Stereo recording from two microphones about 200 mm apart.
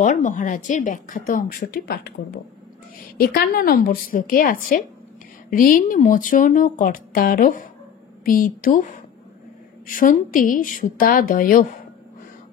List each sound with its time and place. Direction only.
0.0 s a woman's voice: 40° left (ahead or behind)